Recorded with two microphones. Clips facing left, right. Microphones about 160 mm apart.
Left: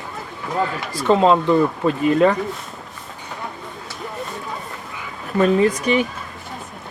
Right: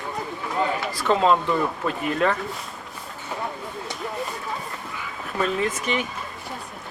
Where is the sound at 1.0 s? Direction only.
30° left (ahead or behind).